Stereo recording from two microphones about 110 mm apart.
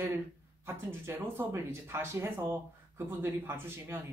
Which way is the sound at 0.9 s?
20° right (ahead or behind).